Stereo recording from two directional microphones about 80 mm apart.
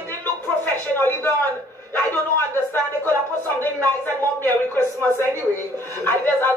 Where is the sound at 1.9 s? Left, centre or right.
Left.